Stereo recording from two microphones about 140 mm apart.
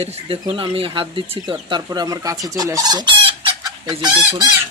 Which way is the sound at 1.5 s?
30° right (ahead or behind).